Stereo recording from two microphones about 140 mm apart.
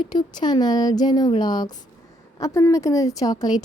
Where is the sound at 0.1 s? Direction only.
30° left (ahead or behind).